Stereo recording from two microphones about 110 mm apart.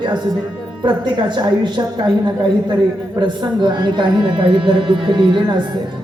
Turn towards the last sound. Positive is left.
turn(degrees=-45)  # may be behind; listen again after turning